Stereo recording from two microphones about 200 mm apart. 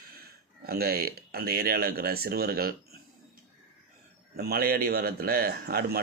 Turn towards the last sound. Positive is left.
turn(degrees=-50)  # may be behind; listen again after turning